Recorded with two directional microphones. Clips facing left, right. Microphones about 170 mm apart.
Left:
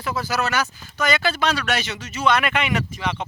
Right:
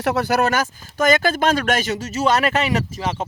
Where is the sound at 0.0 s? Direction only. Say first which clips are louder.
Right 6 dB; 70° right (ahead or behind).